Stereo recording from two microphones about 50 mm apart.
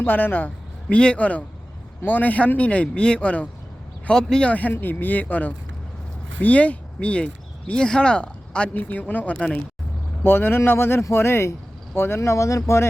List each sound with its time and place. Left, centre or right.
0.0 s a man's voice: left
0.9 s speech: left
4.1 s speech: centre
4.4 s speech: left
10.2 s speech: left
12.2 s speech: left